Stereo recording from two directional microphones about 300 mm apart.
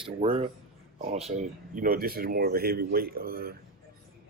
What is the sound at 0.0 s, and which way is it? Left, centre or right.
Speech, centre.